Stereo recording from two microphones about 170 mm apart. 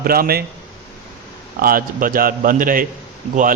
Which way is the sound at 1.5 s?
55° right (ahead or behind).